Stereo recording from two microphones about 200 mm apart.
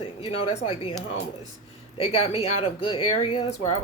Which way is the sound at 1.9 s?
30° left (ahead or behind).